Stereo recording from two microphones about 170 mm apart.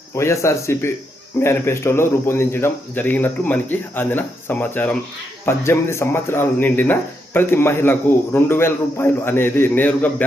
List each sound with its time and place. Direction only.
0.2 s speech: 15° left (ahead or behind)